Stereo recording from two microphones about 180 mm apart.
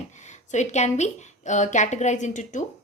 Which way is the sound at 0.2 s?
40° left (ahead or behind).